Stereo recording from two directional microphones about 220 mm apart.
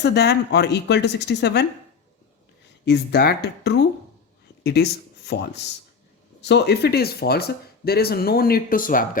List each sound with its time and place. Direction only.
0.0 s speech: 50° left (ahead or behind)
2.8 s speech: 50° left (ahead or behind)